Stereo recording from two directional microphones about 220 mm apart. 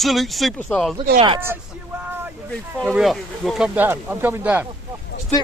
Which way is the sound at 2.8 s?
Centre (ahead or behind).